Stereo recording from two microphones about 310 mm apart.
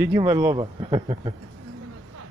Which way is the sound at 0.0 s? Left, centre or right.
Centre.